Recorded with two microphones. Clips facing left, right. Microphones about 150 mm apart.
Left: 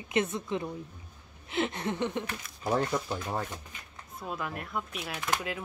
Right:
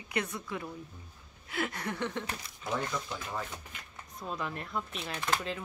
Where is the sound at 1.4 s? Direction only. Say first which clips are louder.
Left 4 dB; 25° left (ahead or behind).